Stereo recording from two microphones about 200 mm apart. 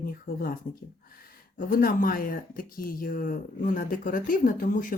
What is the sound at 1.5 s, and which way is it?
Speech, 45° left (ahead or behind).